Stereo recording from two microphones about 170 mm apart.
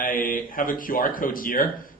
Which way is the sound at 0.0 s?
55° left (ahead or behind).